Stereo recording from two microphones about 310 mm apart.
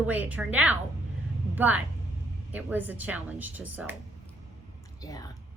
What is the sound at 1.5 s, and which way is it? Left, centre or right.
Vehicle, centre.